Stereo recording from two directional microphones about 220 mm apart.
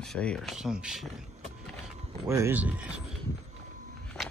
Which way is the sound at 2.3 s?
10° right (ahead or behind).